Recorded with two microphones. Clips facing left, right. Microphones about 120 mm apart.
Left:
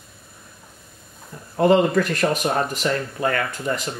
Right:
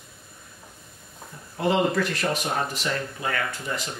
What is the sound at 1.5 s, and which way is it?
Speech, 50° left (ahead or behind).